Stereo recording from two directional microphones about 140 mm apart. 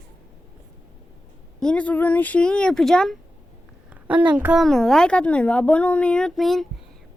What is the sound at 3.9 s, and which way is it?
A woman's voice, 10° right (ahead or behind).